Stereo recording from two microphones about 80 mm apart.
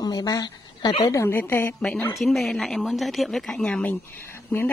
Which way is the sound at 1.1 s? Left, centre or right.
Left.